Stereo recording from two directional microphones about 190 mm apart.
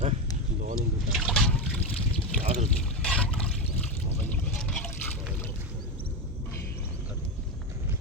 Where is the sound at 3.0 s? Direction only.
5° left (ahead or behind).